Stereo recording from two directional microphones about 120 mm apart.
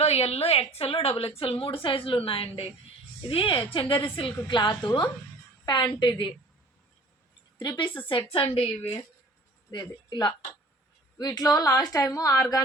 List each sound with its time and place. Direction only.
0.0 s a woman's voice: 60° left (ahead or behind); by 6.3 s 40° left (ahead or behind)
7.6 s a woman's voice: 40° left (ahead or behind)
9.7 s a woman's voice: 35° left (ahead or behind)